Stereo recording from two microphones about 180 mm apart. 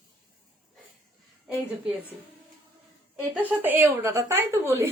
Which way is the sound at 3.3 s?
10° right (ahead or behind).